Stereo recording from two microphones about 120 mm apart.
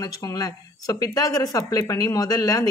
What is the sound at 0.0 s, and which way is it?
Speech, 30° left (ahead or behind).